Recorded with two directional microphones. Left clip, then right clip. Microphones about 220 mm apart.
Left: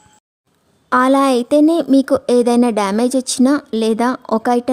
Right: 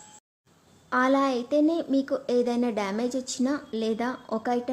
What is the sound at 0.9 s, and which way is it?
A woman's voice, 50° left (ahead or behind).